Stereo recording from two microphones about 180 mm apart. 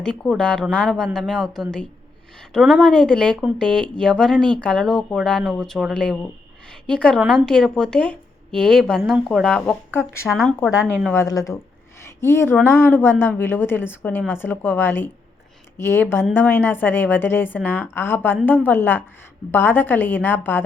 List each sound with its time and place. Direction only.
0.0 s speech: 5° left (ahead or behind)
11.1 s a woman's voice: 15° left (ahead or behind)